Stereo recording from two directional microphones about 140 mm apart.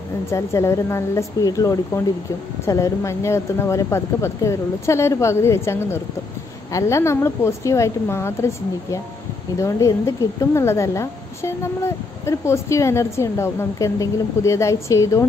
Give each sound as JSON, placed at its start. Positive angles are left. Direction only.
{"t": 0.3, "sound": "a woman's voice", "side_deg": 20}